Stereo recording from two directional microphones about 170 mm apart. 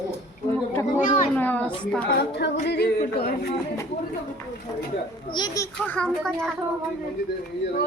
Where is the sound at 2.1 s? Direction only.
75° left (ahead or behind).